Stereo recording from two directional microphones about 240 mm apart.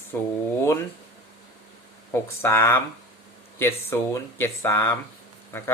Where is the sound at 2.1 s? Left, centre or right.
Centre.